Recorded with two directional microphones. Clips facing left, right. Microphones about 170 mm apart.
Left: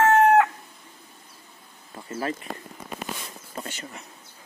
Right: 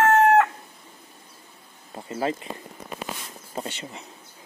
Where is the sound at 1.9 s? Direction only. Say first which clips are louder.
Right 3 dB; 25° right (ahead or behind).